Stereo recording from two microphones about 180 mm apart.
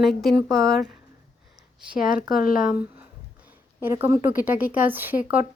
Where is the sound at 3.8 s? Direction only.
10° right (ahead or behind).